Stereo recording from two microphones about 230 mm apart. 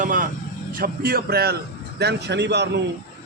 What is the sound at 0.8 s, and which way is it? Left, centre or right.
A man's voice, right.